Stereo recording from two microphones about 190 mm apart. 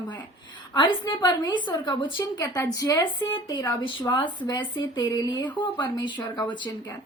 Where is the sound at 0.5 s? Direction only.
25° left (ahead or behind).